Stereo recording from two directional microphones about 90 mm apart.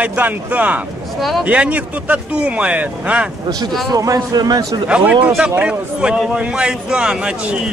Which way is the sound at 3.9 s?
45° right (ahead or behind).